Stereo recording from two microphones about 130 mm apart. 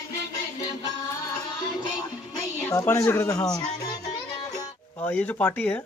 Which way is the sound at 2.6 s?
20° left (ahead or behind).